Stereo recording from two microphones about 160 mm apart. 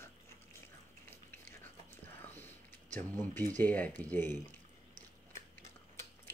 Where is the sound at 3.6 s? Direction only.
10° left (ahead or behind).